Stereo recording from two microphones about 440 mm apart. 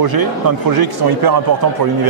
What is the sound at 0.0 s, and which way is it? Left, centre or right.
Speech, right.